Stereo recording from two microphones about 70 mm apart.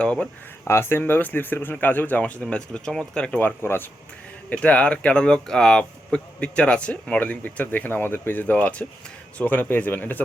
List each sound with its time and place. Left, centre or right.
0.0 s speech: centre
0.7 s speech: left; by 3.4 s centre
3.4 s speech: left
4.4 s speech: centre